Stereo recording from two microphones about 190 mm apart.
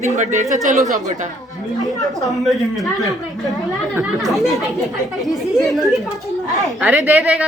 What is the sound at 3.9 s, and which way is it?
Speech, 5° right (ahead or behind).